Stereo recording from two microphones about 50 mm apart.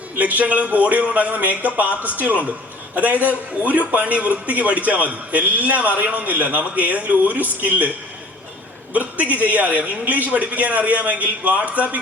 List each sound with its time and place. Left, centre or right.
0.2 s a man's voice: right